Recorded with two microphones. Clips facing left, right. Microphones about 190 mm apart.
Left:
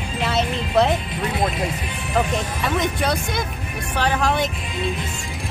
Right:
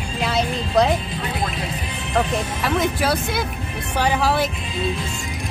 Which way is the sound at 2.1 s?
Centre (ahead or behind).